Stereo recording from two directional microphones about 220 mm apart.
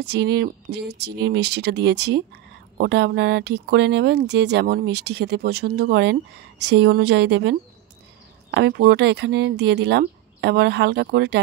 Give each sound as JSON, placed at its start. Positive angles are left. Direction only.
{"t": 0.0, "sound": "speech", "side_deg": -50}